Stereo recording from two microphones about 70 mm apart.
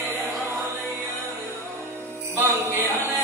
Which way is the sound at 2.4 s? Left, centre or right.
Right.